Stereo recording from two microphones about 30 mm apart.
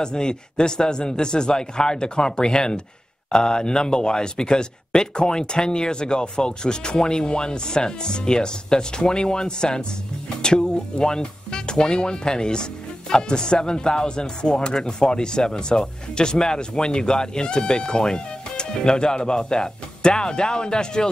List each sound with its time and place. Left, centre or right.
0.0 s speech: left